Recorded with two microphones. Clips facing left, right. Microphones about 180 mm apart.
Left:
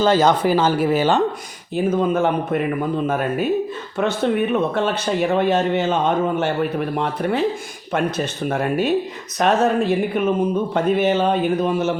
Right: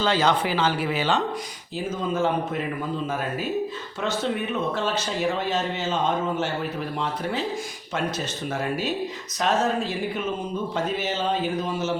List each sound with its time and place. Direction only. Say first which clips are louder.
0.0 s speech: left 6 dB; 45° left (ahead or behind)
1.7 s speech: left 8 dB; 60° left (ahead or behind)